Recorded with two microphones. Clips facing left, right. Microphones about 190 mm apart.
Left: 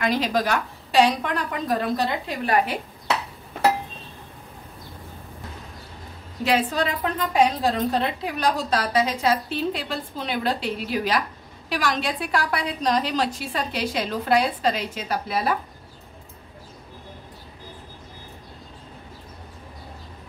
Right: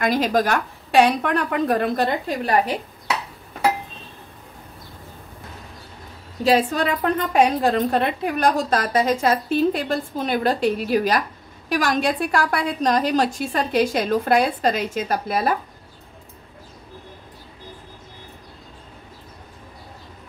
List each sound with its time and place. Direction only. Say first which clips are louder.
0.0 s a woman's voice: right 3 dB; 45° right (ahead or behind)
6.7 s a woman's voice: right 4 dB; 50° right (ahead or behind)